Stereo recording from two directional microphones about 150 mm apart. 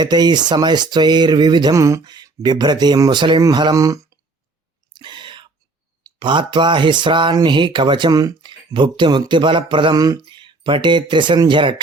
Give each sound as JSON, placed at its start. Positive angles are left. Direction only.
{"t": 0.0, "sound": "speech", "side_deg": -30}
{"t": 4.9, "sound": "whispering", "side_deg": -30}
{"t": 6.1, "sound": "speech", "side_deg": -30}